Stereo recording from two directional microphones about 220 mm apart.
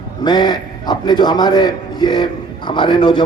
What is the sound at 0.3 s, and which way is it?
A man's voice, 20° left (ahead or behind).